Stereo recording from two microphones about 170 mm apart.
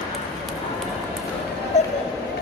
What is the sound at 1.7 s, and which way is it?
Music, 40° left (ahead or behind).